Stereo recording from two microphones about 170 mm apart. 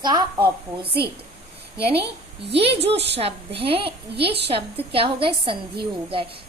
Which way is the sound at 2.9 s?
90° right.